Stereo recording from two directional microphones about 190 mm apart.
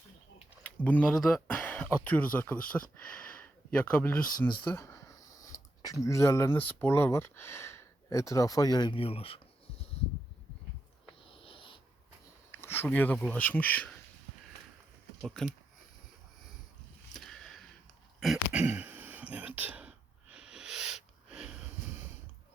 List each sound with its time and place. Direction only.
0.6 s speech: 5° left (ahead or behind); by 9.8 s 30° left (ahead or behind)
11.3 s wheeze: 30° left (ahead or behind)
12.6 s speech: 10° left (ahead or behind)
15.2 s speech: centre (ahead or behind)
17.2 s a sound: centre (ahead or behind)